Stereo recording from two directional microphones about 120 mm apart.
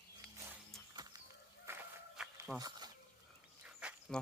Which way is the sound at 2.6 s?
35° right (ahead or behind).